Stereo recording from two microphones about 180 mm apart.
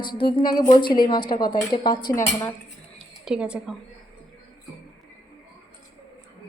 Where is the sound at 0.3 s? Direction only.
25° left (ahead or behind).